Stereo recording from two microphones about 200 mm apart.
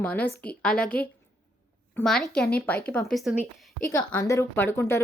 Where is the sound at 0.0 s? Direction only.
10° left (ahead or behind).